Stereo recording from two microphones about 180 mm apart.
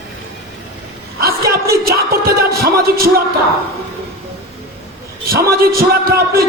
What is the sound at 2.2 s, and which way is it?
Music, 55° right (ahead or behind).